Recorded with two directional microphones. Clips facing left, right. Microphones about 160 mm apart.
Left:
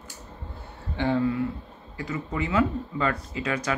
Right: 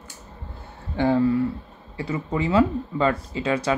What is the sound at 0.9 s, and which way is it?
Speech, 40° right (ahead or behind).